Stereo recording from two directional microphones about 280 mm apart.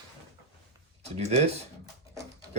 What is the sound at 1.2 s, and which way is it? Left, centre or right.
Speech, right.